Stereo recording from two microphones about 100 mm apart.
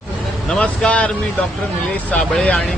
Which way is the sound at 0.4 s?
5° left (ahead or behind).